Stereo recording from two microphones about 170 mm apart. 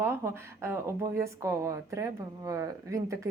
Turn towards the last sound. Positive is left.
turn(degrees=-20)  # may be behind; listen again after turning